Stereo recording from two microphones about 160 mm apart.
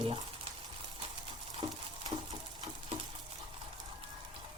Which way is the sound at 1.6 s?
25° right (ahead or behind).